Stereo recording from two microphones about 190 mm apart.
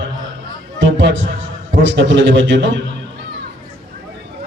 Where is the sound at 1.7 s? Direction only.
70° right (ahead or behind).